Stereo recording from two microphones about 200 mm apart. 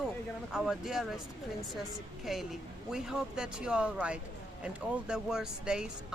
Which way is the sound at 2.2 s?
Centre (ahead or behind).